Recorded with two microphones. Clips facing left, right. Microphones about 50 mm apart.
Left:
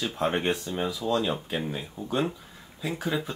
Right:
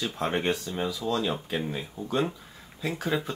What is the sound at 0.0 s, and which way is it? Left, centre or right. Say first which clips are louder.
Speech: left 1 dB; centre.